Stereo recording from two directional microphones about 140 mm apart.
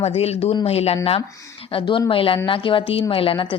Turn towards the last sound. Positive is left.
turn(degrees=35)  # may be behind; listen again after turning